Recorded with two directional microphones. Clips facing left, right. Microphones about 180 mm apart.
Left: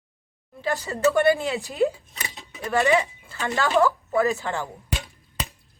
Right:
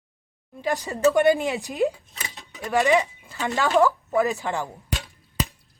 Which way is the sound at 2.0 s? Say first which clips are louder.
Left 1 dB; 15° left (ahead or behind).